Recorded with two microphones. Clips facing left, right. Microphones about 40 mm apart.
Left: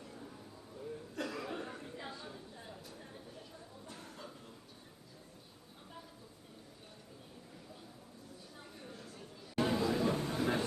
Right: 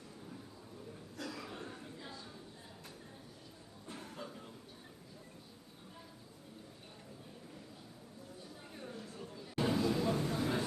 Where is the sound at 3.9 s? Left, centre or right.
Centre.